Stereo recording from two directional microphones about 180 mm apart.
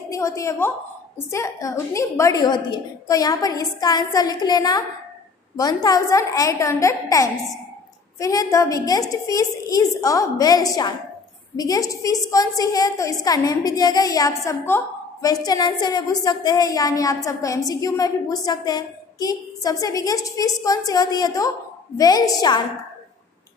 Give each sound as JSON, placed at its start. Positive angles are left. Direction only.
{"t": 0.1, "sound": "a woman's voice", "side_deg": 15}